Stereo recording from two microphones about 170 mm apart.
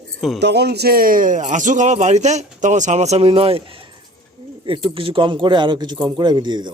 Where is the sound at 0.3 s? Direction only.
85° right.